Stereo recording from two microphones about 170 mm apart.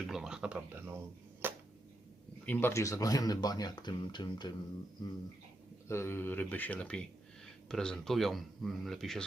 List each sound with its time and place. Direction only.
0.0 s speech: 5° right (ahead or behind)
1.4 s a sound: 10° right (ahead or behind)
2.5 s speech: 15° left (ahead or behind)
5.9 s speech: 15° left (ahead or behind)